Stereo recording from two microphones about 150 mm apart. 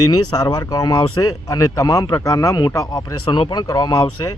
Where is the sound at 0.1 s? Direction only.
25° left (ahead or behind).